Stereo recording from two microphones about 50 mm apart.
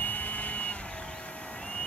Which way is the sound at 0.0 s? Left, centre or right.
Left.